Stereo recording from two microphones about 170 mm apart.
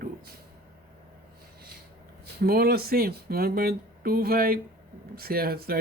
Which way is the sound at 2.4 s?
65° right (ahead or behind).